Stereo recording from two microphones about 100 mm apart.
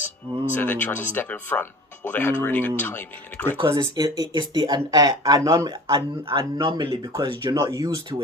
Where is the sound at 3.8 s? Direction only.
40° right (ahead or behind).